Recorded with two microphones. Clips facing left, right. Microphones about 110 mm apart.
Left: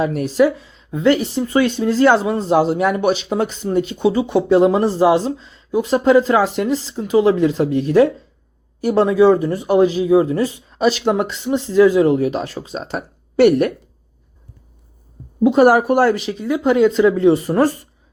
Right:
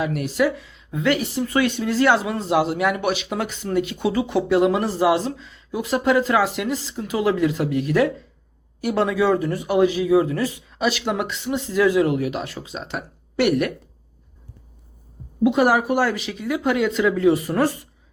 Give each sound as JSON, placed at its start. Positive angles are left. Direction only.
{"t": 0.0, "sound": "speech", "side_deg": 35}
{"t": 15.4, "sound": "speech", "side_deg": 40}